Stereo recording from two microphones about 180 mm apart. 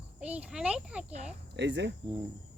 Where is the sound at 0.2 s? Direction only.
5° right (ahead or behind).